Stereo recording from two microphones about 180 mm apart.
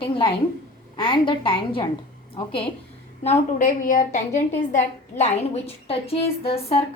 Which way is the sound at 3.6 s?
45° left (ahead or behind).